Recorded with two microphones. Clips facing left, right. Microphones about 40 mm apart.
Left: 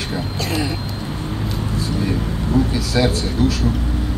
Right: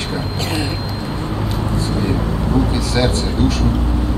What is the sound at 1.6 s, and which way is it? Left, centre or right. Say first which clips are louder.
Vehicle: right 2 dB; right.